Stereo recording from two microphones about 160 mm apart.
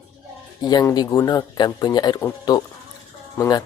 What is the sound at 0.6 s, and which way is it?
Speech, 25° left (ahead or behind).